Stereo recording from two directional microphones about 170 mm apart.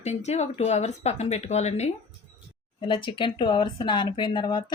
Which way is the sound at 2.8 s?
30° left (ahead or behind).